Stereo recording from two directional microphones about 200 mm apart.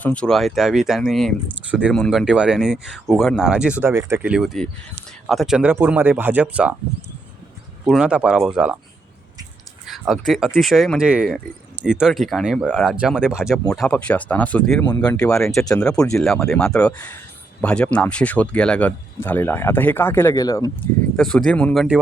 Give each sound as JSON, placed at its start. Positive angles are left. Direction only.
{"t": 0.0, "sound": "speech", "side_deg": 5}
{"t": 7.9, "sound": "speech", "side_deg": -5}
{"t": 9.8, "sound": "speech", "side_deg": 0}
{"t": 14.8, "sound": "speech", "side_deg": 20}
{"t": 16.1, "sound": "speech", "side_deg": 0}
{"t": 21.2, "sound": "speech", "side_deg": 5}